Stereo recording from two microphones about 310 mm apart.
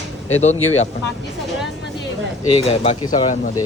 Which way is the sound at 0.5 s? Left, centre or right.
Left.